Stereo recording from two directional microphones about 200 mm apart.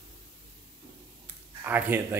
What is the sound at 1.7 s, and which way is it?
Speech, 10° right (ahead or behind).